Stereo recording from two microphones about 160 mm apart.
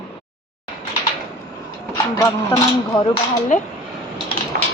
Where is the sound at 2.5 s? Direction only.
25° left (ahead or behind).